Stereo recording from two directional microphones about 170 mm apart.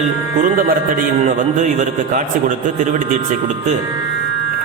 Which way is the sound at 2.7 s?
45° right (ahead or behind).